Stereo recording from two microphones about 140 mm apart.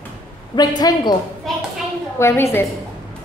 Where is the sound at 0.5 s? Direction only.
30° left (ahead or behind).